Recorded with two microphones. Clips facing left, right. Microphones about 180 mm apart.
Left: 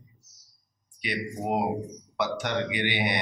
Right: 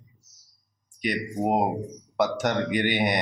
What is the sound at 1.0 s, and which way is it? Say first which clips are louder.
Speech: right 5 dB; 45° right (ahead or behind).